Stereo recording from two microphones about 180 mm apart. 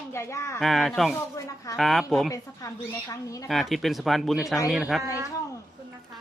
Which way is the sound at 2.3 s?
20° left (ahead or behind).